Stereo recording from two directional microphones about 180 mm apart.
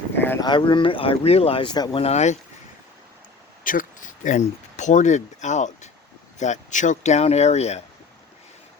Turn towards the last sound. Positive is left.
turn(degrees=35)  # may be behind; listen again after turning